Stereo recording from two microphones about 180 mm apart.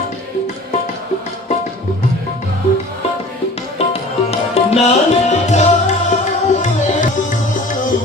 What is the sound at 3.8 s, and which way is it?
Tabla, 35° left (ahead or behind).